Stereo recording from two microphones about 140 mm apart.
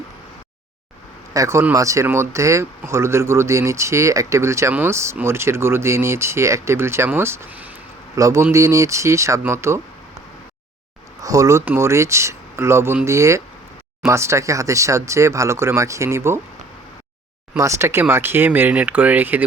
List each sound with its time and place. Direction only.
1.3 s speech: 20° right (ahead or behind)
11.2 s speech: 25° right (ahead or behind)
17.6 s speech: 20° right (ahead or behind)